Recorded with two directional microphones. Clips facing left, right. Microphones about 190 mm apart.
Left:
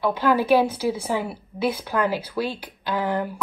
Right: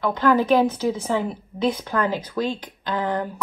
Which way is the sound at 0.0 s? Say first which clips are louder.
Right 2 dB; 10° left (ahead or behind).